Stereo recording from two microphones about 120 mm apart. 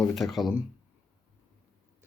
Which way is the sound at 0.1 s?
Centre (ahead or behind).